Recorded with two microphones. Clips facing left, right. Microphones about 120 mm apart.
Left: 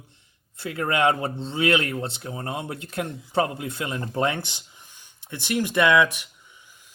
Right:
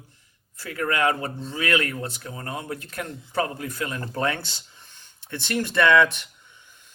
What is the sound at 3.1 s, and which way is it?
Speech, centre (ahead or behind).